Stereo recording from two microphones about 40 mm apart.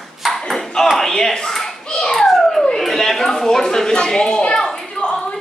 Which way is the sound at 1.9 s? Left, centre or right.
Centre.